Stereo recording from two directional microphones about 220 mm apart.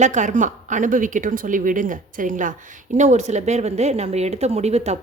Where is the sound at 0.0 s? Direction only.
35° right (ahead or behind).